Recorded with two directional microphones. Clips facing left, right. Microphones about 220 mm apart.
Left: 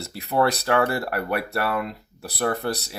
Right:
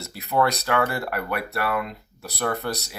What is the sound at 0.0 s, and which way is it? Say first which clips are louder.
Speech: left 1 dB; 30° left (ahead or behind).